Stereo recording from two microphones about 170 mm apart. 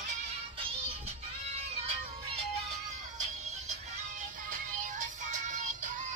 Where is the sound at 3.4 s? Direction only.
40° right (ahead or behind).